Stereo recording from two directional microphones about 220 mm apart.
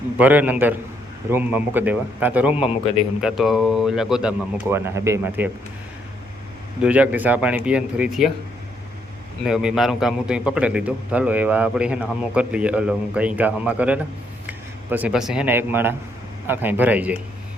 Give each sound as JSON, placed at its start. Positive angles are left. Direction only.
{"t": 0.2, "sound": "a man's voice", "side_deg": -5}
{"t": 6.8, "sound": "a man's voice", "side_deg": -5}
{"t": 9.4, "sound": "a man's voice", "side_deg": -5}